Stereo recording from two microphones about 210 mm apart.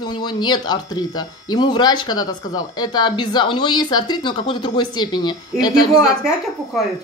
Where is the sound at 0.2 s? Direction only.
20° left (ahead or behind).